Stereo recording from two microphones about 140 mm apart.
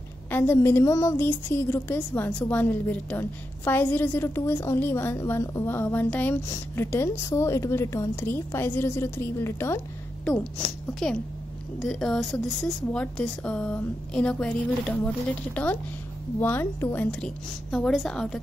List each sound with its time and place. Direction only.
0.3 s a woman's voice: 15° left (ahead or behind)
10.6 s a woman's voice: 5° left (ahead or behind)